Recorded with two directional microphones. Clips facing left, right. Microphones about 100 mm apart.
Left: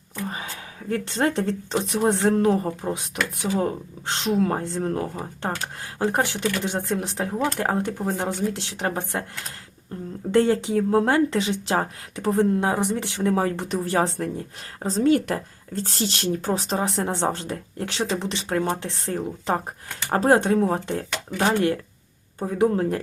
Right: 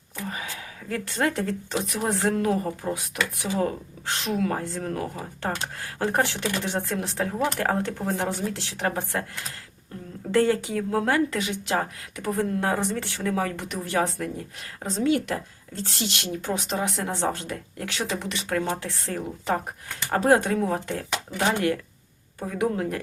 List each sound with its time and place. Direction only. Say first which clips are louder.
0.9 s speech: left 3 dB; 30° left (ahead or behind)
10.3 s speech: left 3 dB; 25° left (ahead or behind)
12.5 s speech: left 2 dB; 15° left (ahead or behind)
13.3 s a woman's voice: left 3 dB; 30° left (ahead or behind)